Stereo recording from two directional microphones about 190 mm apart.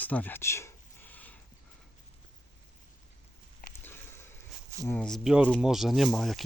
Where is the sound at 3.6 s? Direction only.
50° left (ahead or behind).